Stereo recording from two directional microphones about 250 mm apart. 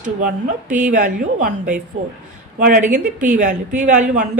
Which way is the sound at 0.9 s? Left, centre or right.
Right.